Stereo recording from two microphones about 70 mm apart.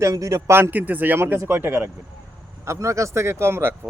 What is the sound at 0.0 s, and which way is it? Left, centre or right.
Speech, right.